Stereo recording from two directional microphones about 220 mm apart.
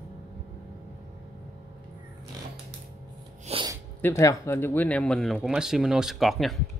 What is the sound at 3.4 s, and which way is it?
Sneeze, 25° right (ahead or behind).